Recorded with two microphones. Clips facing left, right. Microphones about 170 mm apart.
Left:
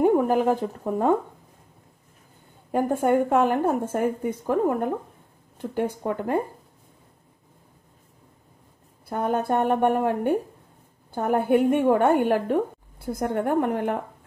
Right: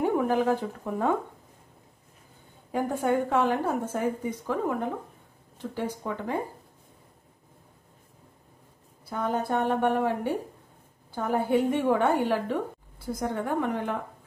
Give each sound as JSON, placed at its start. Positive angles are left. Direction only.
{"t": 0.0, "sound": "a sound", "side_deg": 45}
{"t": 2.7, "sound": "a woman's voice", "side_deg": 50}
{"t": 9.1, "sound": "a woman's voice", "side_deg": 55}